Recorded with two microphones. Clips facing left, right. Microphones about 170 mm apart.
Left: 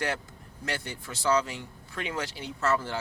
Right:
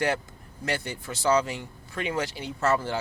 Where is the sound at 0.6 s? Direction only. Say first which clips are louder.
Right 4 dB; 5° right (ahead or behind).